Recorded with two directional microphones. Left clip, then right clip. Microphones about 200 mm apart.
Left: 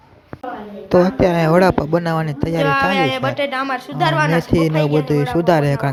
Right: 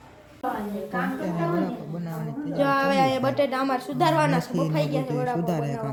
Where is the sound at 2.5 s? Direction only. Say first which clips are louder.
Left 5 dB; centre (ahead or behind).